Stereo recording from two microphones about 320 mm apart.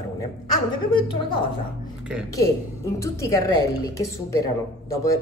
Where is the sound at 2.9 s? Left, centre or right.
Centre.